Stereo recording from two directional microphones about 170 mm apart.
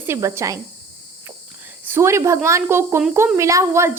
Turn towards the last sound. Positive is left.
turn(degrees=-15)  # may be behind; listen again after turning